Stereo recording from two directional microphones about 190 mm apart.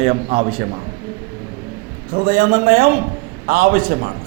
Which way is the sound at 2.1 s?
45° right (ahead or behind).